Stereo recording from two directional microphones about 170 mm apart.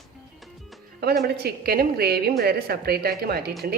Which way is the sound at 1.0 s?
70° right (ahead or behind).